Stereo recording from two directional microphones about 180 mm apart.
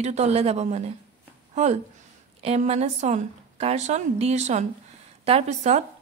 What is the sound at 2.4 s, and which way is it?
Speech, 35° right (ahead or behind).